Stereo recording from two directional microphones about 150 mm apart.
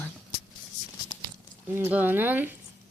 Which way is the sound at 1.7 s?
15° right (ahead or behind).